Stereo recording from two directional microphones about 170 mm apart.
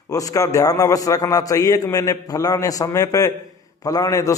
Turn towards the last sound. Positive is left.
turn(degrees=20)  # may be behind; listen again after turning